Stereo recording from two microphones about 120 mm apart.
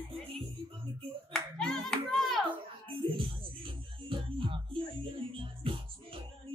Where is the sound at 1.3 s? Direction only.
5° left (ahead or behind).